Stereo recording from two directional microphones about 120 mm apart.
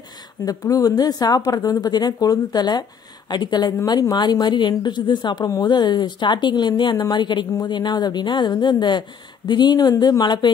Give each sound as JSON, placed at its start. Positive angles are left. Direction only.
{"t": 0.5, "sound": "a woman's voice", "side_deg": 30}